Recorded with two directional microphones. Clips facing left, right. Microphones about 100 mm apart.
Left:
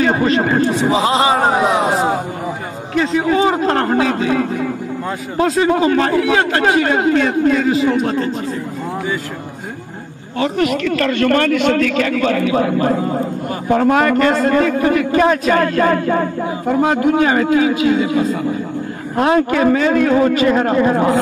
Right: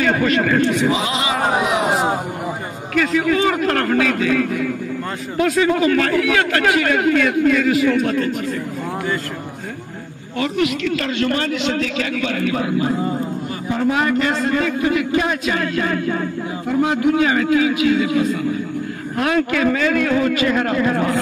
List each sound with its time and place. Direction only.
0.0 s a man's voice: 30° left (ahead or behind)
1.9 s a sound: centre (ahead or behind)
2.9 s a man's voice: 30° left (ahead or behind)
10.4 s a man's voice: 45° left (ahead or behind); by 21.2 s 25° left (ahead or behind)